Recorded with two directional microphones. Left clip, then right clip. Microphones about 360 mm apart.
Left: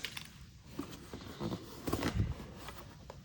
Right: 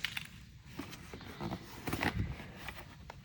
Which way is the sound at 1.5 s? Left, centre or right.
Centre.